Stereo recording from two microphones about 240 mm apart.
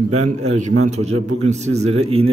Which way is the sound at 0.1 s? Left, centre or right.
Right.